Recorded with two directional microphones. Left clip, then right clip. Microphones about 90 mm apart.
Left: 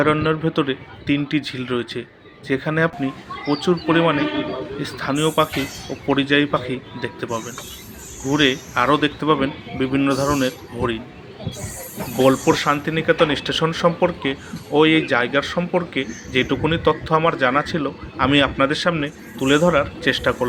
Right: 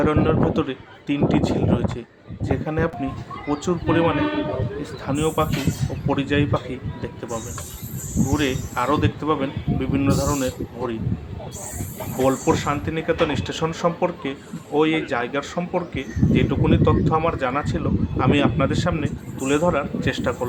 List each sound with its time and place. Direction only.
0.0 s speech: 20° left (ahead or behind)
8.3 s speech: 40° left (ahead or behind)
12.2 s speech: 30° left (ahead or behind)